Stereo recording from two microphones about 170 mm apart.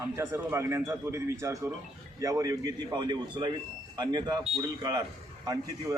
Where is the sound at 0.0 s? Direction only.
15° right (ahead or behind).